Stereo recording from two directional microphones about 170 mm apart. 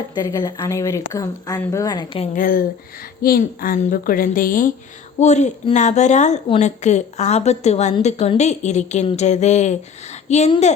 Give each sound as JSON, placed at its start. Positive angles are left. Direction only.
{"t": 0.1, "sound": "speech", "side_deg": 20}
{"t": 2.3, "sound": "a woman's voice", "side_deg": 55}
{"t": 5.2, "sound": "a woman's voice", "side_deg": 45}